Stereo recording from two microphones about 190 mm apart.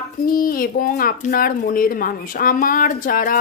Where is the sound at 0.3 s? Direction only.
50° left (ahead or behind).